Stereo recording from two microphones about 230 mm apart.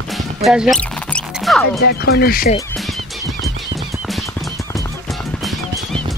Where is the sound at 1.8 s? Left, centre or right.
Left.